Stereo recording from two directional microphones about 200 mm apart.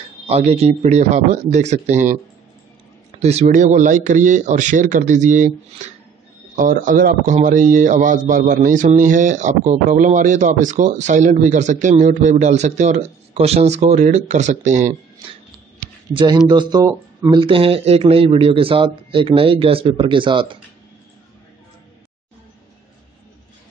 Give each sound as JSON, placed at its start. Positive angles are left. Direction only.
{"t": 0.3, "sound": "speech", "side_deg": -30}
{"t": 3.2, "sound": "speech", "side_deg": -35}
{"t": 6.5, "sound": "speech", "side_deg": -40}
{"t": 16.1, "sound": "speech", "side_deg": -25}